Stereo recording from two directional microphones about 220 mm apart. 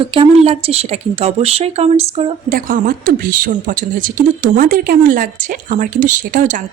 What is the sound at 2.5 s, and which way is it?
A woman's voice, 40° right (ahead or behind).